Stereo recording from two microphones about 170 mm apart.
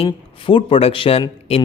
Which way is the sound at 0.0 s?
30° left (ahead or behind).